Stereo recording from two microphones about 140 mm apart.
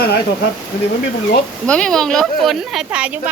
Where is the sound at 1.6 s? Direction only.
5° left (ahead or behind).